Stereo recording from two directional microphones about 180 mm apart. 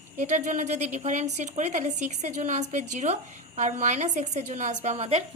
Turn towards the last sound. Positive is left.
turn(degrees=-35)  # may be behind; listen again after turning